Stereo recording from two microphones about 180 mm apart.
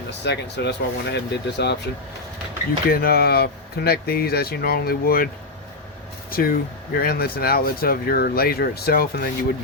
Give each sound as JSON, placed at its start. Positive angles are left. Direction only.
{"t": 0.1, "sound": "speech", "side_deg": 70}
{"t": 2.9, "sound": "speech", "side_deg": 55}
{"t": 6.3, "sound": "speech", "side_deg": 55}